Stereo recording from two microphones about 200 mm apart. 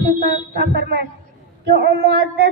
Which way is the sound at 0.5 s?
55° right (ahead or behind).